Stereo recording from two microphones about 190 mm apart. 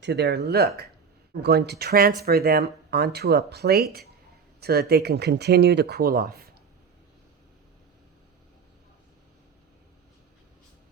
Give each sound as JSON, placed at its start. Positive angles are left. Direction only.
{"t": 0.0, "sound": "speech", "side_deg": -65}